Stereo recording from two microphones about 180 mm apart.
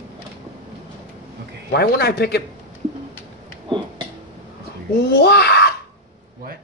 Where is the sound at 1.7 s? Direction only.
65° left (ahead or behind).